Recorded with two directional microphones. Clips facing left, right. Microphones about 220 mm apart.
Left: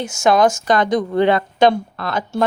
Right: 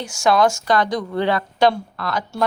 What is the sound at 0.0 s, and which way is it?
Speech, 20° left (ahead or behind).